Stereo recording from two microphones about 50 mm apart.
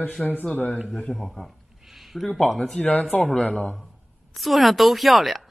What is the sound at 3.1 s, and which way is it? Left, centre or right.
Speech, left.